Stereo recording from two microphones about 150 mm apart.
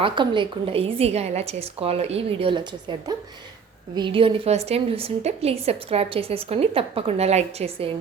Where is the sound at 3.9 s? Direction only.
35° right (ahead or behind).